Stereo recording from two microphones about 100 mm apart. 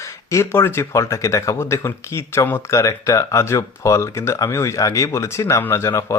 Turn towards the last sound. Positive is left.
turn(degrees=30)  # may be behind; listen again after turning